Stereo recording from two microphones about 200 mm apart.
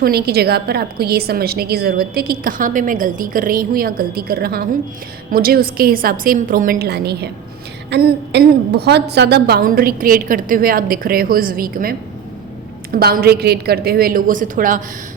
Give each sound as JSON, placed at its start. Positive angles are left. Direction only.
{"t": 0.0, "sound": "a woman's voice", "side_deg": -50}